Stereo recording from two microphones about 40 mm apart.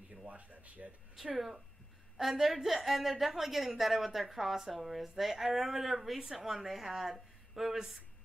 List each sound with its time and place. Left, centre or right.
0.1 s speech: right
1.1 s a woman's voice: centre